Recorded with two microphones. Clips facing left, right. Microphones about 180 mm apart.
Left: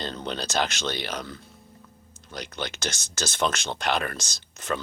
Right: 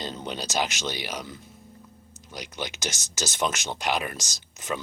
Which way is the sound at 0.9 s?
10° right (ahead or behind).